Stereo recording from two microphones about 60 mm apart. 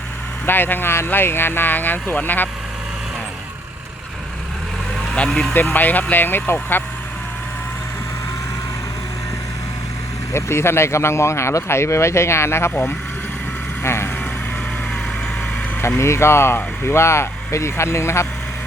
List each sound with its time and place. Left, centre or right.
0.4 s speech: left
5.1 s speech: centre
5.5 s speech: left
10.3 s speech: left
13.8 s vehicle: left
16.0 s speech: left